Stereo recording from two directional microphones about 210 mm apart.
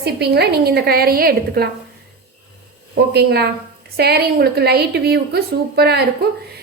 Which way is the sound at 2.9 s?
50° right (ahead or behind).